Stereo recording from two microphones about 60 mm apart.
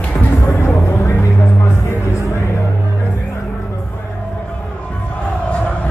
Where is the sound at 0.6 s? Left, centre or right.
Left.